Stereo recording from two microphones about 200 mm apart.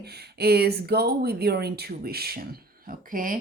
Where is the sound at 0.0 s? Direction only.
55° right (ahead or behind).